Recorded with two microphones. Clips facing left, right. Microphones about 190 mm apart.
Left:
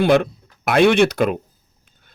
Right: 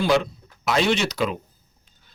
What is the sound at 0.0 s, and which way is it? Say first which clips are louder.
Speech: left 5 dB; 60° left (ahead or behind).